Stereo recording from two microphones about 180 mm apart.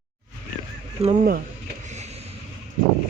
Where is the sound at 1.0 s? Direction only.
35° right (ahead or behind).